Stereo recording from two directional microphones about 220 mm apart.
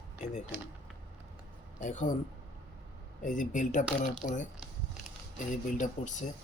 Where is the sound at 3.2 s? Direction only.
35° left (ahead or behind).